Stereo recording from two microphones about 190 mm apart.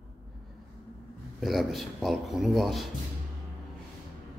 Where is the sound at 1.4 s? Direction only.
Centre (ahead or behind).